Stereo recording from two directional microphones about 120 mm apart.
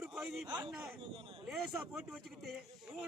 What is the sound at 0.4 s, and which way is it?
Speech, 35° right (ahead or behind).